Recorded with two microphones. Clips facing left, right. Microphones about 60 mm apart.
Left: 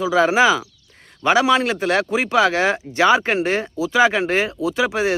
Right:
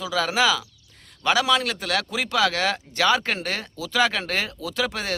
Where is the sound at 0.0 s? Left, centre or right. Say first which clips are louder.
Left 7 dB; left.